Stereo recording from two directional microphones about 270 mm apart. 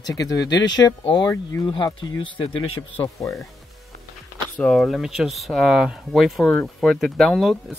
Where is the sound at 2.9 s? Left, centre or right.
Centre.